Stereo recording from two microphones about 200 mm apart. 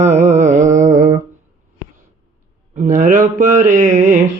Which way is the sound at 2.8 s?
40° right (ahead or behind).